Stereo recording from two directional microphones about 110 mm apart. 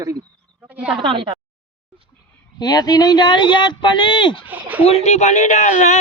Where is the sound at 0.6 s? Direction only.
10° right (ahead or behind).